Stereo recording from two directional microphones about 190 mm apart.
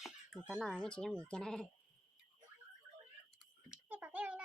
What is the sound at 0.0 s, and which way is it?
Speech, centre (ahead or behind).